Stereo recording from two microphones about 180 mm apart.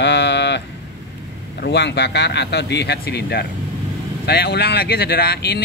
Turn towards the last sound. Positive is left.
turn(degrees=60)  # may be behind; listen again after turning